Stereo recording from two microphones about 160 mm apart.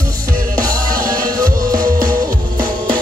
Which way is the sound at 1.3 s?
25° right (ahead or behind).